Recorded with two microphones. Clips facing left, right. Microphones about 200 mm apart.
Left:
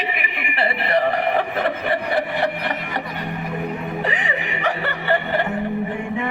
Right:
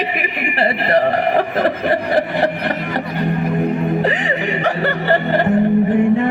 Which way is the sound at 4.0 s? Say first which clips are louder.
Right 6 dB; 35° right (ahead or behind).